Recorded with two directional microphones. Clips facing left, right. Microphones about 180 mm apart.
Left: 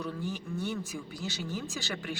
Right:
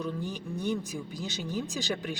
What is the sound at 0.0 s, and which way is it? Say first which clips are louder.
Speech: right 2 dB; 15° right (ahead or behind).